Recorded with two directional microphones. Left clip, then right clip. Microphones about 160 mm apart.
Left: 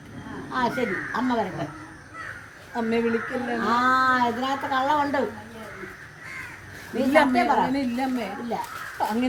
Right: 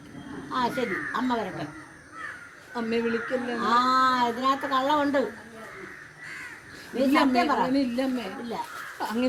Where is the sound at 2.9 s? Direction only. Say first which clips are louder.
Left 2 dB; 15° left (ahead or behind).